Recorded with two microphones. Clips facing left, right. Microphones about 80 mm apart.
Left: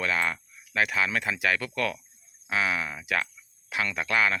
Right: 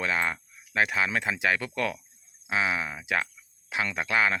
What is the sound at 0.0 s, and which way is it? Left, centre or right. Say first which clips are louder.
Speech: even; right.